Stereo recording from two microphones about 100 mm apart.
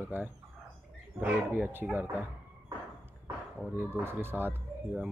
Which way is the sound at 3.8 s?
25° right (ahead or behind).